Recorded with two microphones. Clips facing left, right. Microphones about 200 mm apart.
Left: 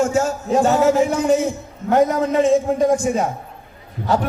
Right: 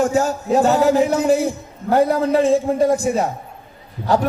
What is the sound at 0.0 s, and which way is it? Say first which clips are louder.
A man's voice: right 1 dB; 35° right (ahead or behind).